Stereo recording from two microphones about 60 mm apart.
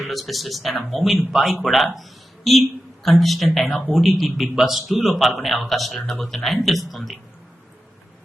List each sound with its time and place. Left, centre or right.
0.1 s a man's voice: centre